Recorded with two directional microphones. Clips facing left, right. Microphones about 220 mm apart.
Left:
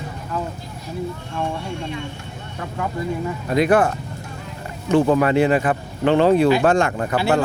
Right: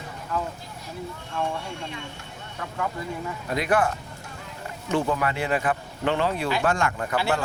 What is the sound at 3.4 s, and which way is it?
Speech, 25° left (ahead or behind).